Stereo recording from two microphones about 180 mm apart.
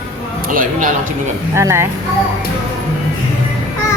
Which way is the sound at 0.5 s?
50° right (ahead or behind).